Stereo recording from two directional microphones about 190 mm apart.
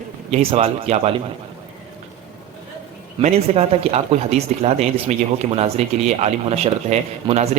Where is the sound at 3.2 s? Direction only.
35° right (ahead or behind).